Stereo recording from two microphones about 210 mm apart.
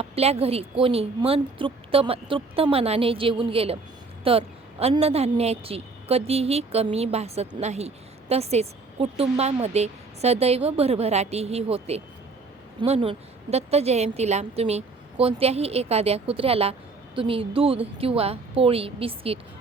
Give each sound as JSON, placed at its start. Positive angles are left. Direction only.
{"t": 0.0, "sound": "a woman's voice", "side_deg": -30}